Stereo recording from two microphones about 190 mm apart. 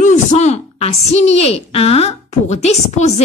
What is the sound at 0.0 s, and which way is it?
A woman's voice, 40° left (ahead or behind).